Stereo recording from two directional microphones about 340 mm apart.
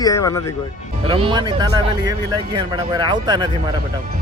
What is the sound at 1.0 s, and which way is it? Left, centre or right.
Speech, centre.